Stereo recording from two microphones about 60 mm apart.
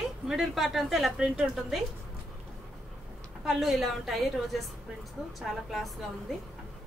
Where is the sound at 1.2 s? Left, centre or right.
Centre.